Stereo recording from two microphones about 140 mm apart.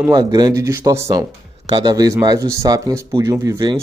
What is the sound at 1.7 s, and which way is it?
Speech, 35° right (ahead or behind).